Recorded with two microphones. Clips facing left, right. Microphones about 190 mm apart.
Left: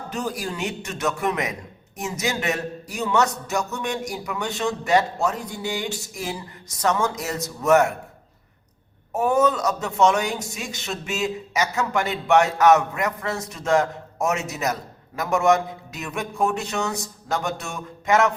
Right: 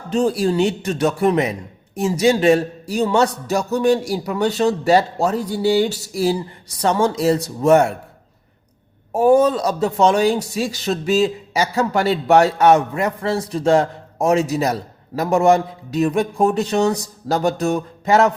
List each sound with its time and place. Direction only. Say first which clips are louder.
0.1 s a man's voice: right 12 dB; 30° right (ahead or behind)
9.1 s a man's voice: right 6 dB; 30° right (ahead or behind)